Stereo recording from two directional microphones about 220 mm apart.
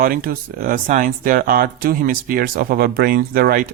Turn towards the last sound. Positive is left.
turn(degrees=-40)  # may be behind; listen again after turning